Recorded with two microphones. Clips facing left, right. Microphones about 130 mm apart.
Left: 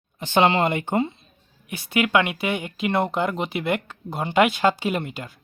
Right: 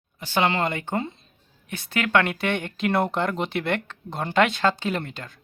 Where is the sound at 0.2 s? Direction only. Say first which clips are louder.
Left 4 dB; 20° left (ahead or behind).